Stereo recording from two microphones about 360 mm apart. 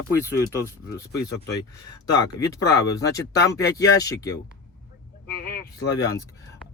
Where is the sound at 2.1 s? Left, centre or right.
Centre.